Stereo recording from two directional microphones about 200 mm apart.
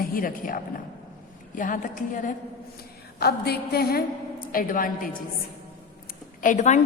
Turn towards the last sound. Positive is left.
turn(degrees=35)  # may be behind; listen again after turning